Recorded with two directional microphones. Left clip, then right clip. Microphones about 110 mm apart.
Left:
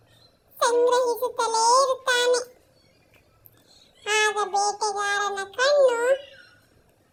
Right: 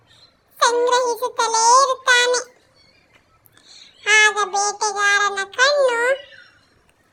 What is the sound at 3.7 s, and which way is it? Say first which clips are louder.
Child singing: right 9 dB; 10° left (ahead or behind).